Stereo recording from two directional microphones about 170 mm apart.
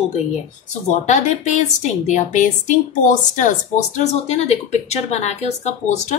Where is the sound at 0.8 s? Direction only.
45° left (ahead or behind).